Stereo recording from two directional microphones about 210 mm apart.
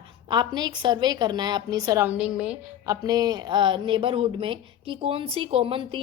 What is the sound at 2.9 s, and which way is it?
A woman's voice, 20° right (ahead or behind).